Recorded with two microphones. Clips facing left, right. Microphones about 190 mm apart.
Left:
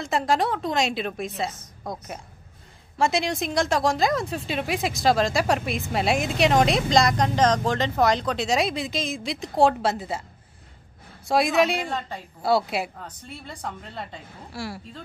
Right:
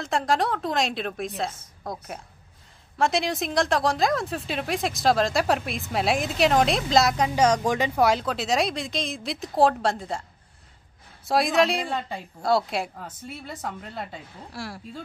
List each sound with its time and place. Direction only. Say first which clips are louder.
0.0 s a woman's voice: left 1 dB; centre (ahead or behind)
11.2 s a woman's voice: left 1 dB; centre (ahead or behind)